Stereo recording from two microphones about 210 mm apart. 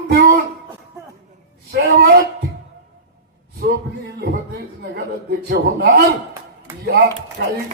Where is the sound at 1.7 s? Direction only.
50° right (ahead or behind).